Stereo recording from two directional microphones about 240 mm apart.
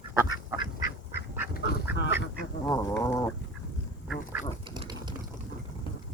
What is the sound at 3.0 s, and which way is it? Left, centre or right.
Chicken, centre.